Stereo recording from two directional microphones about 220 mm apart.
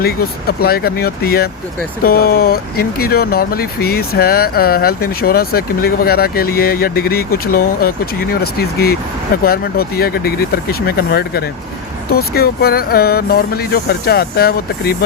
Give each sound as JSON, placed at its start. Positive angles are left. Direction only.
{"t": 0.0, "sound": "speech", "side_deg": 45}